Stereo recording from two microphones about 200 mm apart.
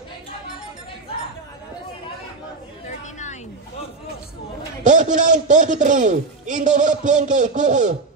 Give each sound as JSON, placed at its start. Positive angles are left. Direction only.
{"t": 4.8, "sound": "a man's voice", "side_deg": -40}